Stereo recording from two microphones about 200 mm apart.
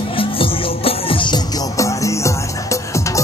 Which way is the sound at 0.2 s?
25° left (ahead or behind).